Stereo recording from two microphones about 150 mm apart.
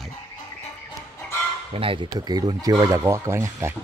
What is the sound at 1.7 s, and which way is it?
Speech, 40° right (ahead or behind).